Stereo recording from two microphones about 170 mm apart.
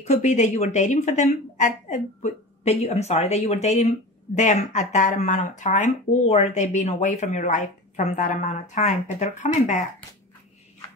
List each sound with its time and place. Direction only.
0.0 s speech: 45° left (ahead or behind)